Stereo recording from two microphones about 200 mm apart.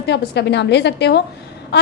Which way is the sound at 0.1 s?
60° left (ahead or behind).